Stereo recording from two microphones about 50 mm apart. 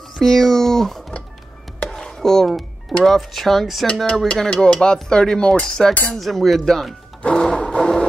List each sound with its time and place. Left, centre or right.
0.2 s speech: centre
3.8 s speech: centre
7.2 s music: centre